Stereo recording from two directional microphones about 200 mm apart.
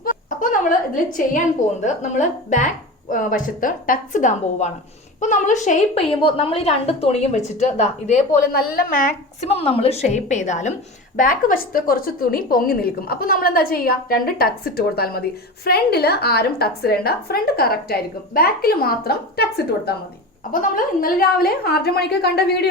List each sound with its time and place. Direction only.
0.0 s a sound: 40° left (ahead or behind)
1.8 s a woman's voice: 35° left (ahead or behind)
6.1 s a woman's voice: 25° left (ahead or behind)
8.5 s a woman's voice: 50° left (ahead or behind)